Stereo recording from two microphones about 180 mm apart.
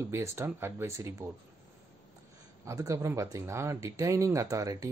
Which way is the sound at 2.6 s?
15° right (ahead or behind).